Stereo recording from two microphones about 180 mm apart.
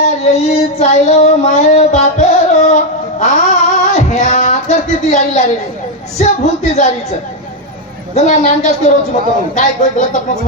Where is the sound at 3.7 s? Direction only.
40° left (ahead or behind).